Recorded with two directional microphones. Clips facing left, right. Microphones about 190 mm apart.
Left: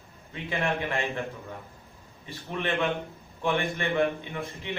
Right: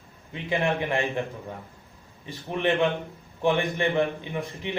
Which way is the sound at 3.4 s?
15° right (ahead or behind).